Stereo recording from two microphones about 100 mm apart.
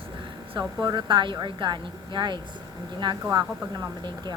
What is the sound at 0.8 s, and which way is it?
Speech, 50° right (ahead or behind).